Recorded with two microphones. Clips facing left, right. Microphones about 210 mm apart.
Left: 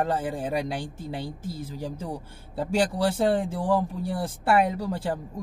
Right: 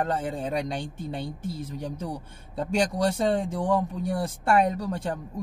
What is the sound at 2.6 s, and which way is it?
Speech, 5° left (ahead or behind).